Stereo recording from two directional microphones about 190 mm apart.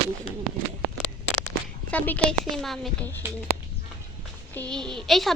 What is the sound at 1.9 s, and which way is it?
A woman's voice, 10° left (ahead or behind).